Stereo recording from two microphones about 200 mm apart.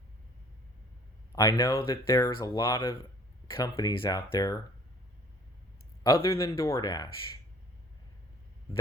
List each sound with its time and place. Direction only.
1.4 s speech: 15° left (ahead or behind)
6.0 s speech: 20° left (ahead or behind)